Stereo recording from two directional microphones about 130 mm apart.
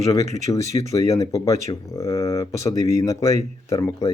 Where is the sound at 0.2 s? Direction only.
25° left (ahead or behind).